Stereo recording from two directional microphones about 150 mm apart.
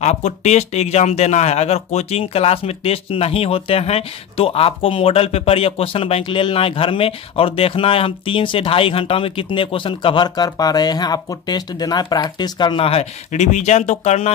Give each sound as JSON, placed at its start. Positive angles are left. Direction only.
{"t": 0.0, "sound": "speech", "side_deg": 50}